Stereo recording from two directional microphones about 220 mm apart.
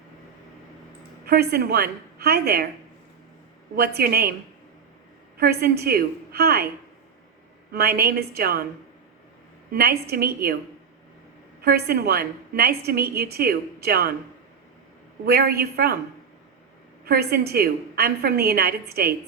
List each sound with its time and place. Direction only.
1.2 s a woman's voice: 45° right (ahead or behind)
3.8 s a woman's voice: 45° right (ahead or behind)
5.4 s a woman's voice: 45° right (ahead or behind)
7.7 s a woman's voice: 45° right (ahead or behind)
9.7 s a woman's voice: 45° right (ahead or behind)
11.6 s a woman's voice: 45° right (ahead or behind)
15.3 s a woman's voice: 45° right (ahead or behind)
17.1 s a woman's voice: 45° right (ahead or behind)